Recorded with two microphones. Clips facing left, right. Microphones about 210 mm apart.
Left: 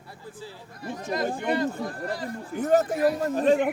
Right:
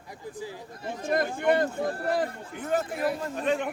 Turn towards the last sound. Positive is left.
turn(degrees=35)  # may be behind; listen again after turning